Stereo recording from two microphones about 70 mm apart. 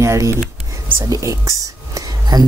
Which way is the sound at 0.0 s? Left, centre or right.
Right.